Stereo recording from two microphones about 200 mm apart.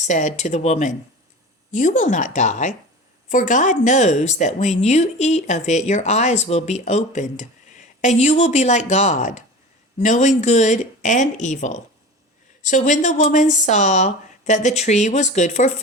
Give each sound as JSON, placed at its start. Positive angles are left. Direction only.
{"t": 0.0, "sound": "a woman's voice", "side_deg": 35}